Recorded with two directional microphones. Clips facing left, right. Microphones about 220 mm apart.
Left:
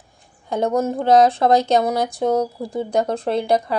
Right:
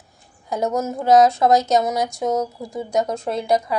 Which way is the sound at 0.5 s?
30° left (ahead or behind).